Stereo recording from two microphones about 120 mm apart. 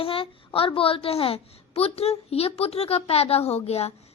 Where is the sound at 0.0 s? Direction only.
50° left (ahead or behind).